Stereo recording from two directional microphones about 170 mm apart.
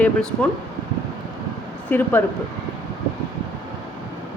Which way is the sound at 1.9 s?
10° left (ahead or behind).